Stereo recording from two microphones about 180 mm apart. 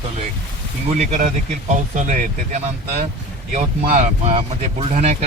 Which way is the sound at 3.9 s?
45° right (ahead or behind).